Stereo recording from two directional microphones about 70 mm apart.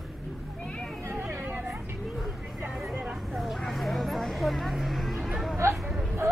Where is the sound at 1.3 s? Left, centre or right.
Right.